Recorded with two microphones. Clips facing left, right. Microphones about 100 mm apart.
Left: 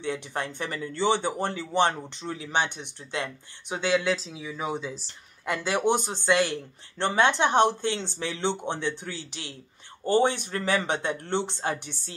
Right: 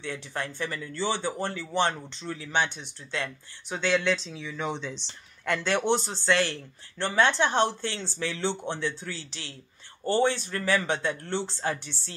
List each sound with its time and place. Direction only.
0.0 s speech: 20° left (ahead or behind)